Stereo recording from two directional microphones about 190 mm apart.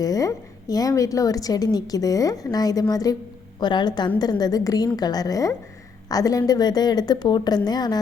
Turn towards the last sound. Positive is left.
turn(degrees=20)  # may be behind; listen again after turning